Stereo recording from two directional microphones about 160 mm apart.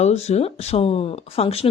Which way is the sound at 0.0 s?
45° left (ahead or behind).